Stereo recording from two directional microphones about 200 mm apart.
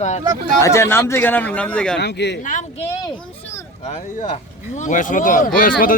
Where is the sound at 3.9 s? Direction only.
35° left (ahead or behind).